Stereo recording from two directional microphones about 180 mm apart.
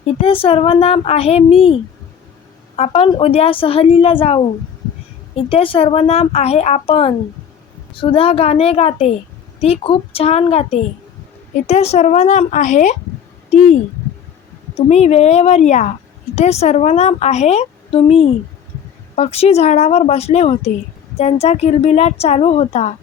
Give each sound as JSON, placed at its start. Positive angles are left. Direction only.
{"t": 0.0, "sound": "a woman's voice", "side_deg": 30}
{"t": 14.8, "sound": "a woman's voice", "side_deg": 35}